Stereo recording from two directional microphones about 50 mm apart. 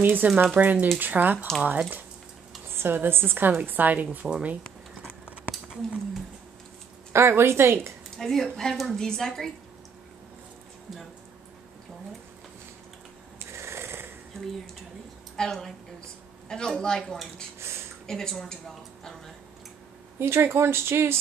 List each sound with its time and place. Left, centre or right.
0.0 s speech: right
1.6 s speech: right
2.7 s speech: right
7.1 s speech: right
8.2 s speech: centre
13.5 s a sound: right
15.3 s a woman's voice: centre
17.6 s a sound: right
18.0 s speech: centre
20.2 s speech: right